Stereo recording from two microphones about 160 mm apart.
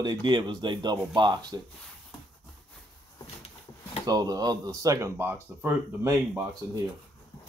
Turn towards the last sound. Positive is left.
turn(degrees=-20)  # may be behind; listen again after turning